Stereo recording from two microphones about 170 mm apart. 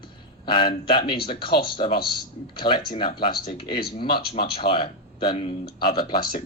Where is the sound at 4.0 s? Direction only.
30° left (ahead or behind).